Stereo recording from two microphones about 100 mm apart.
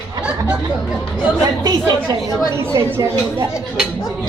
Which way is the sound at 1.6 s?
40° right (ahead or behind).